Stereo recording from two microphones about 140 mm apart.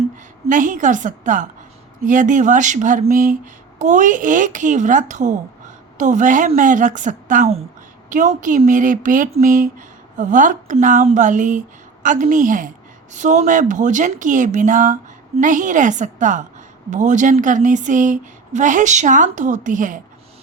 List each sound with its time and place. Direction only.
0.4 s a woman's voice: 65° right (ahead or behind)
3.1 s a woman's voice: 75° right (ahead or behind)
13.1 s a woman's voice: 60° right (ahead or behind)